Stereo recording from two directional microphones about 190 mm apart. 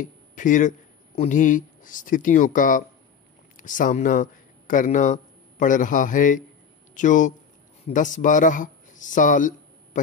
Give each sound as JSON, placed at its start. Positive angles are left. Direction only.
{"t": 0.0, "sound": "a man's voice", "side_deg": 40}